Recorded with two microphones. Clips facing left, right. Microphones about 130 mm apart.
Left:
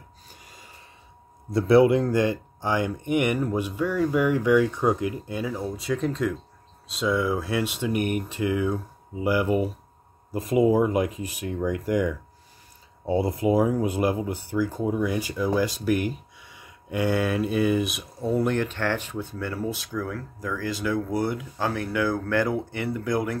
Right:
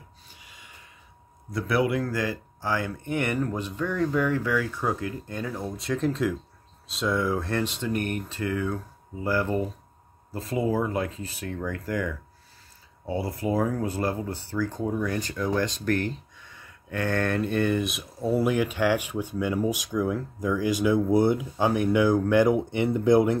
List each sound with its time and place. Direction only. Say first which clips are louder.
0.3 s snort: left 4 dB; 40° left (ahead or behind)
1.5 s speech: left 7 dB; 30° left (ahead or behind); by 23.4 s 25° right (ahead or behind)